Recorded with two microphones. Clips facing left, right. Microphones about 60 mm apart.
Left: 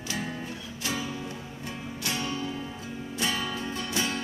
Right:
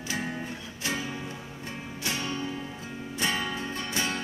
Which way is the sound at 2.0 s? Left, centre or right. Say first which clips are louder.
Even; right.